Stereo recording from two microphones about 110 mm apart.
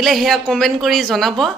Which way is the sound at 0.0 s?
Centre (ahead or behind).